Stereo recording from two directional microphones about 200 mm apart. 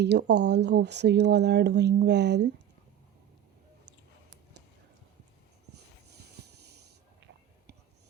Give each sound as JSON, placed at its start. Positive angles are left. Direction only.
{"t": 0.0, "sound": "speech", "side_deg": -55}